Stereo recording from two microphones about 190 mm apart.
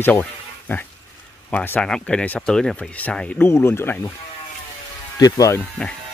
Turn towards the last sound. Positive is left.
turn(degrees=15)  # may be behind; listen again after turning